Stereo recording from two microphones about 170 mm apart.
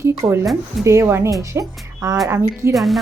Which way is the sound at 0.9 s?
15° right (ahead or behind).